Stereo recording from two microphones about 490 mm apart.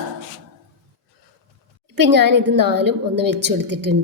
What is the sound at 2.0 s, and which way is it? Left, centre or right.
A woman's voice, right.